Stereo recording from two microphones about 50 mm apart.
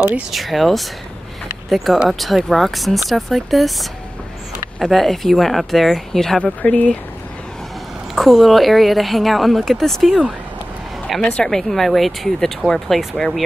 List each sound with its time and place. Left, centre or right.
0.3 s a woman's voice: centre
2.0 s a woman's voice: centre
4.7 s a woman's voice: centre
6.6 s speech: left
8.1 s a woman's voice: centre
11.3 s speech: centre
11.7 s a woman's voice: centre